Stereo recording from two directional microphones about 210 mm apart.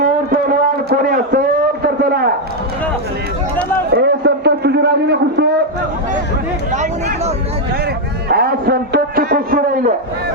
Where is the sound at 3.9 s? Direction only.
50° right (ahead or behind).